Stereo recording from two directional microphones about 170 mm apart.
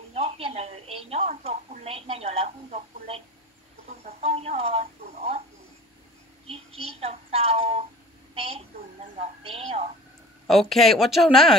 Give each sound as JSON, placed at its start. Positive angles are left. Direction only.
{"t": 0.1, "sound": "a woman's voice", "side_deg": -35}
{"t": 4.0, "sound": "a sound", "side_deg": -35}
{"t": 6.4, "sound": "a woman's voice", "side_deg": -35}
{"t": 10.4, "sound": "speech", "side_deg": 0}